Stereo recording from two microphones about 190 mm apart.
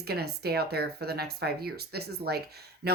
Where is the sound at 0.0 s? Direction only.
55° right (ahead or behind).